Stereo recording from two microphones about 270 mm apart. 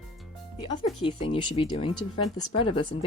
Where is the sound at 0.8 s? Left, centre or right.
Centre.